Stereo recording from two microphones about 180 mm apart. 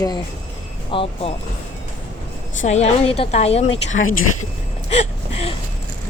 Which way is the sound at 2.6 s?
40° left (ahead or behind).